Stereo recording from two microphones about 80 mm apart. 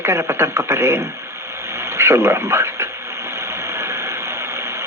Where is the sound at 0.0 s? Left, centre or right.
Right.